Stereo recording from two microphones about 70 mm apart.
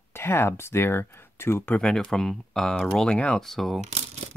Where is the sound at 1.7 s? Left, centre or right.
Centre.